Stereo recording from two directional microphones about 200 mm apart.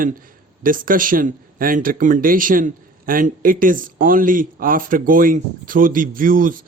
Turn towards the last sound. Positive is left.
turn(degrees=-45)  # may be behind; listen again after turning